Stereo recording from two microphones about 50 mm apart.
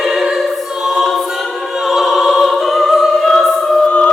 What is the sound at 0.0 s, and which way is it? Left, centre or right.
Choir, centre.